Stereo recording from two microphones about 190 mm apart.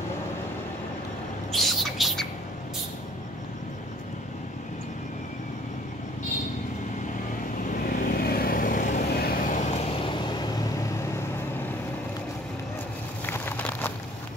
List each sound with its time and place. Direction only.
1.5 s bird: centre (ahead or behind)
7.8 s vehicle: 45° left (ahead or behind); by 11.2 s 20° left (ahead or behind)
13.2 s a sound: 10° left (ahead or behind)